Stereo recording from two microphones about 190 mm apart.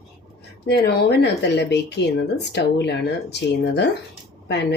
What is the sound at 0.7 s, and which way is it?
A woman's voice, 60° left (ahead or behind).